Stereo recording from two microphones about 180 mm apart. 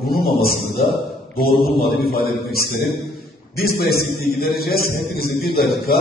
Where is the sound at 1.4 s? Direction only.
60° left (ahead or behind).